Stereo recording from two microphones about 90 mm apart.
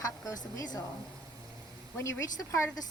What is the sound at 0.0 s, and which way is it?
Speech, 40° left (ahead or behind).